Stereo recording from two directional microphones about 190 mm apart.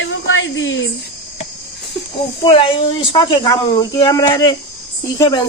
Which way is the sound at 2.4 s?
25° left (ahead or behind).